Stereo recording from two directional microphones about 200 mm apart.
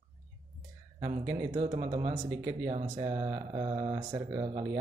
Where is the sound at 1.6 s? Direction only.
30° right (ahead or behind).